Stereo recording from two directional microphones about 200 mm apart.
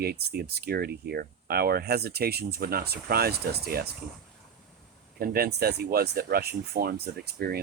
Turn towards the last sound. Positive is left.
turn(degrees=-50)  # may be behind; listen again after turning